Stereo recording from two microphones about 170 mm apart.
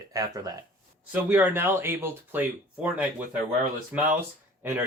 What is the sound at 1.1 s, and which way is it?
Speech, 10° right (ahead or behind).